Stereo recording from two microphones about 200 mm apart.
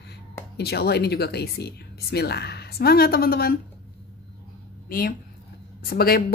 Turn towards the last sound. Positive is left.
turn(degrees=50)  # may be behind; listen again after turning